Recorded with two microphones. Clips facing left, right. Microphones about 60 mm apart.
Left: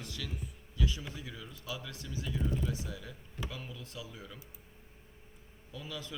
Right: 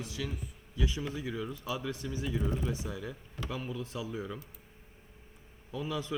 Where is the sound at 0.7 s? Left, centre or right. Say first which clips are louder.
Right 3 dB; right.